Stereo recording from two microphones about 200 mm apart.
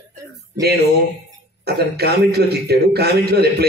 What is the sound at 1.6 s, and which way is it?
A man's voice, 55° right (ahead or behind).